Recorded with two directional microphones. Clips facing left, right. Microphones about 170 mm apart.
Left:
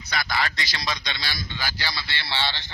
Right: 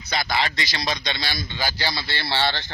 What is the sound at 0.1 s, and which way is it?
A man's voice, 25° right (ahead or behind).